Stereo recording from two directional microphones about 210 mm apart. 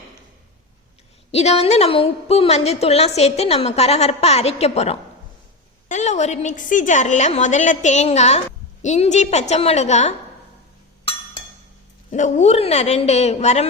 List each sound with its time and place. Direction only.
1.3 s a woman's voice: 30° left (ahead or behind)
12.1 s a woman's voice: 35° left (ahead or behind)